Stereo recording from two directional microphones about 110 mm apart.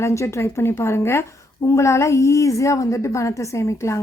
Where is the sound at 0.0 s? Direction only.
25° left (ahead or behind).